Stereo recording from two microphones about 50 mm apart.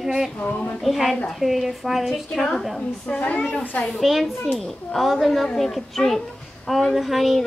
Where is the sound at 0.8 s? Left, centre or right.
Centre.